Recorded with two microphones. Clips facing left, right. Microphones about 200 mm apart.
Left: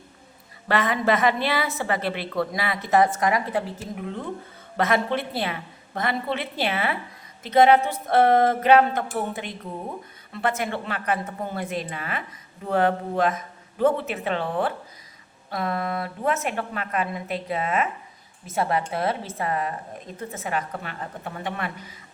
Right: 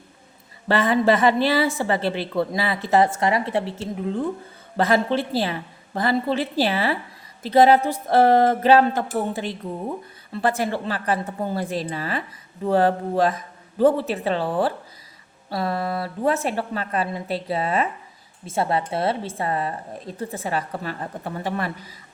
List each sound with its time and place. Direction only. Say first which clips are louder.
0.7 s a woman's voice: right 4 dB; 30° right (ahead or behind)